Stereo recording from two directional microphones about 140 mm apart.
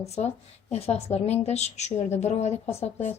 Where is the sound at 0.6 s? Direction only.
50° left (ahead or behind).